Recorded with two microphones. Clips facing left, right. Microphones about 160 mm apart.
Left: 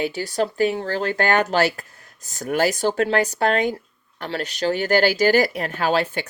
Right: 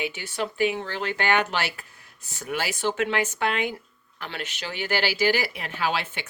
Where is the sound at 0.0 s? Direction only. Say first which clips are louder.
Left 7 dB; 40° left (ahead or behind).